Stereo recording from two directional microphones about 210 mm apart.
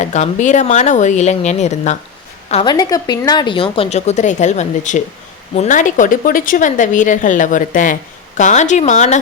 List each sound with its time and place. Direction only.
0.0 s a woman's voice: 35° left (ahead or behind)